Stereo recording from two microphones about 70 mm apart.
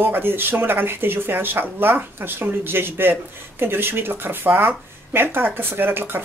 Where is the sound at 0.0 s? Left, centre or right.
Right.